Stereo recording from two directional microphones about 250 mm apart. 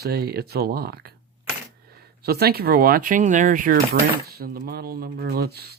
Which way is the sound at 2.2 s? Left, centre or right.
Right.